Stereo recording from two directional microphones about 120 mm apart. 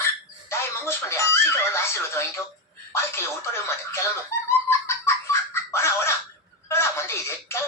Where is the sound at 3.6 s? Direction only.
20° left (ahead or behind).